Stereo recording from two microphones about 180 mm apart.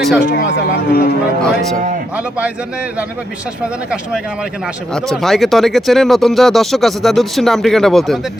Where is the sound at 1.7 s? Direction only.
50° right (ahead or behind).